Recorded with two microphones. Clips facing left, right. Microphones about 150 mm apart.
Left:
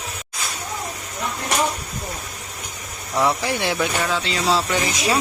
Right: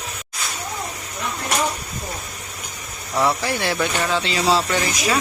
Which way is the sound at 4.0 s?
Centre (ahead or behind).